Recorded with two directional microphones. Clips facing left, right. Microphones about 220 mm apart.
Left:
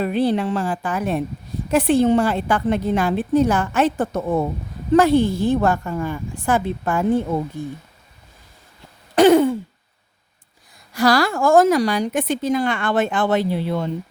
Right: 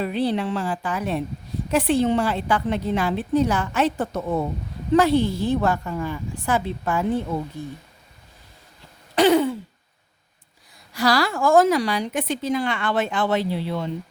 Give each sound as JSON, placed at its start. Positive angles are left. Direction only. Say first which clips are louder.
{"t": 0.0, "sound": "a woman's voice", "louder": "left 4 dB", "side_deg": 50}
{"t": 9.1, "sound": "throat clearing", "louder": "left 5 dB", "side_deg": 50}
{"t": 10.9, "sound": "a woman's voice", "louder": "left 4 dB", "side_deg": 50}